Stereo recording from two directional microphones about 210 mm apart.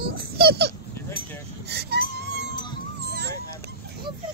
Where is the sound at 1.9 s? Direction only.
50° left (ahead or behind).